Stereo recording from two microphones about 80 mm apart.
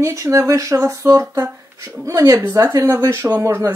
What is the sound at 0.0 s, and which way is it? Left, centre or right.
Speech, right.